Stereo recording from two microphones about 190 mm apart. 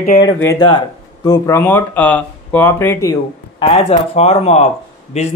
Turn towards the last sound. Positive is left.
turn(degrees=35)  # may be behind; listen again after turning